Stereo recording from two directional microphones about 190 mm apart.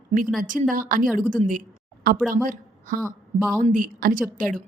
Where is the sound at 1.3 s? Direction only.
45° right (ahead or behind).